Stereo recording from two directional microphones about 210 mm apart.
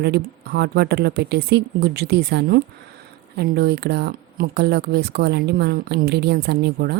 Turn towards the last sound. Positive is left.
turn(degrees=-50)  # may be behind; listen again after turning